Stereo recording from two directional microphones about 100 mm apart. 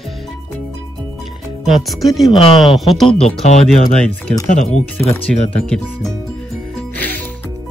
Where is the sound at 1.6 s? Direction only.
Centre (ahead or behind).